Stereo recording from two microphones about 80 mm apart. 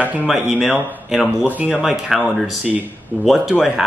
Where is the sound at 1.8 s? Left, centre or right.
Centre.